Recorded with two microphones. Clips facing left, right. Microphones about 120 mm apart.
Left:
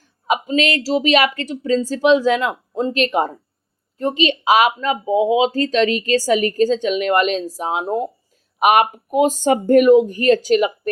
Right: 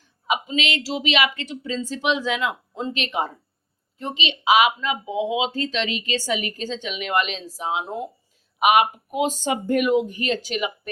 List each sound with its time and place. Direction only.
0.3 s speech: 45° left (ahead or behind)